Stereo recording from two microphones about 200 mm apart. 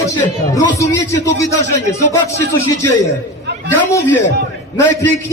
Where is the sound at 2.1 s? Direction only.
15° left (ahead or behind).